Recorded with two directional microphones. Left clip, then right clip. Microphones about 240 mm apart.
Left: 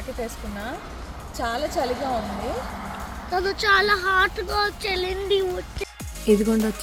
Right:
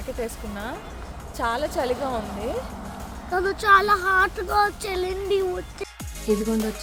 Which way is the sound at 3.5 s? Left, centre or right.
Right.